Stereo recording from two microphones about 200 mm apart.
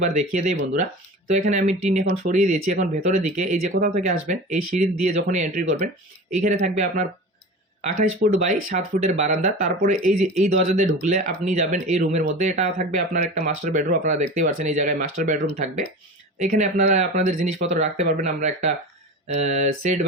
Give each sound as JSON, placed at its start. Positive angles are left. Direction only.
{"t": 0.2, "sound": "speech", "side_deg": -35}